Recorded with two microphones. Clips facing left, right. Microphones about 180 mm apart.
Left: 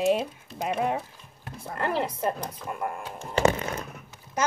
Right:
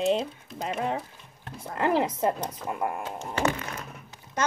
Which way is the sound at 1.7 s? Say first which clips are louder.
Right 3 dB; 15° right (ahead or behind).